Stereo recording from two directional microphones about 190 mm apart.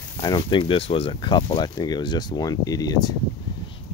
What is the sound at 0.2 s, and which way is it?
Speech, 25° left (ahead or behind).